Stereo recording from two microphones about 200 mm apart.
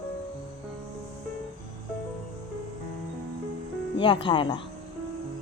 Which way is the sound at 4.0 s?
25° left (ahead or behind).